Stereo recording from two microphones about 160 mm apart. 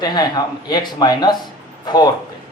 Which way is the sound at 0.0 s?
25° left (ahead or behind).